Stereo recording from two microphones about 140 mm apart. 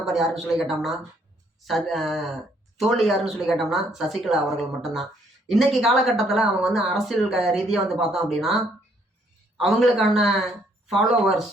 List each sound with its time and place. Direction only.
0.0 s speech: centre (ahead or behind)
9.6 s speech: centre (ahead or behind)